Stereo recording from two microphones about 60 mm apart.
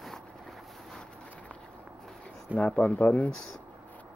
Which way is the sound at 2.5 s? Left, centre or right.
Left.